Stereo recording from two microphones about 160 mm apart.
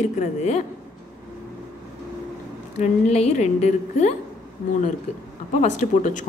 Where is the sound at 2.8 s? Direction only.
45° left (ahead or behind).